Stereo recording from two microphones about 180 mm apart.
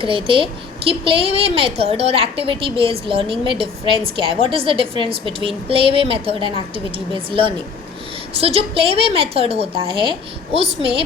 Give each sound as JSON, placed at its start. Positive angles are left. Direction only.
{"t": 0.0, "sound": "a woman's voice", "side_deg": -30}